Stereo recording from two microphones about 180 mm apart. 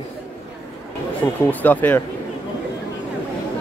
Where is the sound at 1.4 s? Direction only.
10° left (ahead or behind).